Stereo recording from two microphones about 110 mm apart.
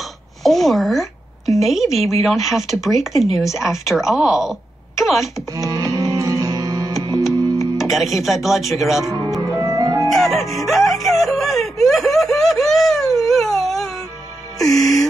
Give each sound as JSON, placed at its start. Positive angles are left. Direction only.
{"t": 0.4, "sound": "a sound", "side_deg": 0}
{"t": 1.6, "sound": "a woman's voice", "side_deg": 0}
{"t": 5.6, "sound": "music", "side_deg": -30}
{"t": 7.7, "sound": "a woman's voice", "side_deg": 0}
{"t": 9.4, "sound": "music", "side_deg": -30}
{"t": 10.0, "sound": "music", "side_deg": 5}